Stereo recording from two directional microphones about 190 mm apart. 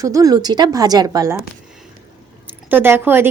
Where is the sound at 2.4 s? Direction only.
10° right (ahead or behind).